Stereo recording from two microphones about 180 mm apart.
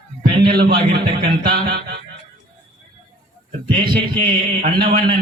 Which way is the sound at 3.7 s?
30° right (ahead or behind).